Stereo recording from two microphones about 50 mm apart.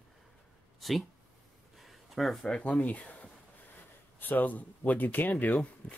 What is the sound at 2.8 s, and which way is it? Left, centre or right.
Speech, left.